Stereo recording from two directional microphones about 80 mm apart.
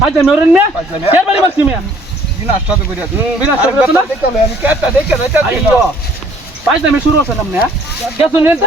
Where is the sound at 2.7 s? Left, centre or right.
Centre.